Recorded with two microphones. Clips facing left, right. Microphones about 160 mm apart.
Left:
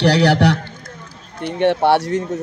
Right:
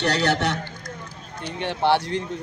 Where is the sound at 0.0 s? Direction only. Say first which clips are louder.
Left 8 dB; 70° left (ahead or behind).